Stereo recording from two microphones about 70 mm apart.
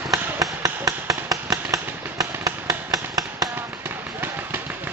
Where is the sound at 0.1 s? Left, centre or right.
Right.